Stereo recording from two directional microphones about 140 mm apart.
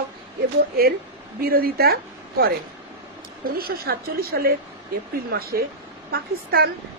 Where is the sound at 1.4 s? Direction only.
90° right.